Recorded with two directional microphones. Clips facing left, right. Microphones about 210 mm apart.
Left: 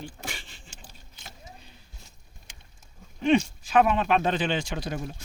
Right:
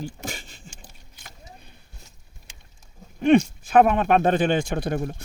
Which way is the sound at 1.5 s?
55° right (ahead or behind).